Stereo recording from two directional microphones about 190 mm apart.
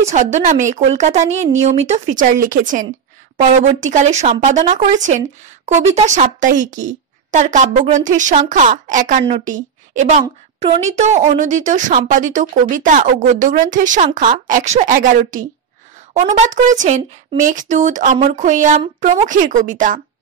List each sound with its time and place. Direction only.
0.1 s a woman's voice: 40° right (ahead or behind)